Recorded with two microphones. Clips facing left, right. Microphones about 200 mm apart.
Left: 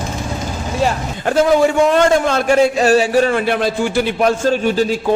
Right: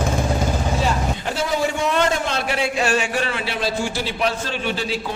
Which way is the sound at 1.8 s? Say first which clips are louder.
Left 7 dB; 45° left (ahead or behind).